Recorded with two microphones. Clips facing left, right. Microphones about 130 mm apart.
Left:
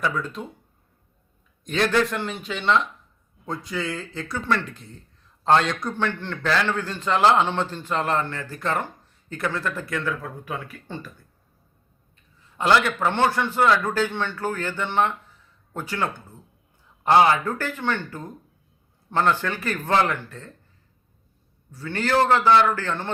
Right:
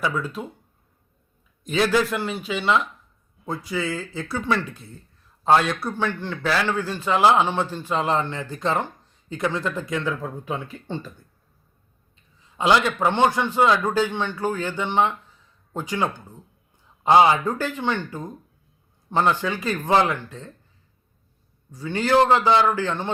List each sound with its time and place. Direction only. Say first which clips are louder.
0.0 s speech: right 1 dB; 5° right (ahead or behind)
1.6 s a man's voice: right 1 dB; 5° right (ahead or behind); by 11.1 s 25° right (ahead or behind)
12.5 s a man's voice: right 1 dB; 15° right (ahead or behind)
21.7 s a man's voice: right 3 dB; 15° right (ahead or behind)